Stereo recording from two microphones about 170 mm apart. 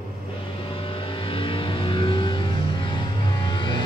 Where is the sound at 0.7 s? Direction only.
30° left (ahead or behind).